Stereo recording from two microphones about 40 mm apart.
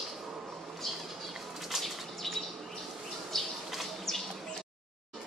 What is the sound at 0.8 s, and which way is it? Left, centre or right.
Bird flight, centre.